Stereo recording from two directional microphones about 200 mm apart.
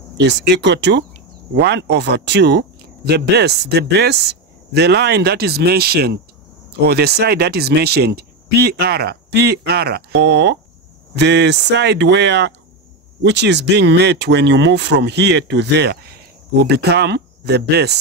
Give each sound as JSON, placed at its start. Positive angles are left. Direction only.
{"t": 0.2, "sound": "speech", "side_deg": -60}